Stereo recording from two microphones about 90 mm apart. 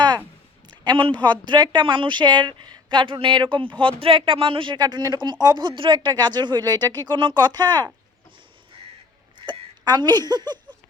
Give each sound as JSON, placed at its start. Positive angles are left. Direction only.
{"t": 0.7, "sound": "a sound", "side_deg": -60}
{"t": 1.2, "sound": "a woman's voice", "side_deg": -55}
{"t": 9.5, "sound": "speech", "side_deg": -55}